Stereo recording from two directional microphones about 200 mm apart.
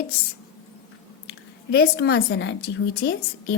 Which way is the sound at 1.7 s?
60° left (ahead or behind).